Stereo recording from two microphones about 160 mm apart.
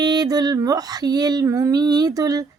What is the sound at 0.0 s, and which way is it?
Speech, 25° right (ahead or behind).